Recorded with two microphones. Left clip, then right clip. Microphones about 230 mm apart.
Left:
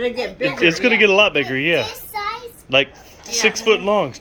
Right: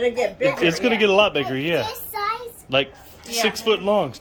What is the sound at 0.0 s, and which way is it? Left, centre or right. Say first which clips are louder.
Speech: right 1 dB; left.